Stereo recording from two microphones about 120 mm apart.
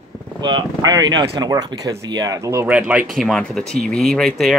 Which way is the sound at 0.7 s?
30° right (ahead or behind).